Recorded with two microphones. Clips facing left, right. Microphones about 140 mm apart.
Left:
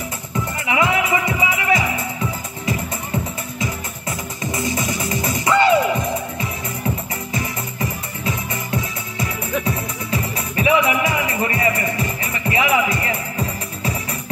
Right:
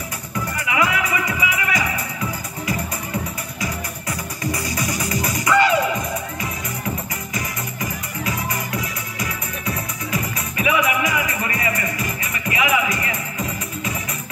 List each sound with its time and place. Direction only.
0.7 s music: 25° left (ahead or behind)
4.4 s music: 25° left (ahead or behind)
7.3 s music: 30° left (ahead or behind)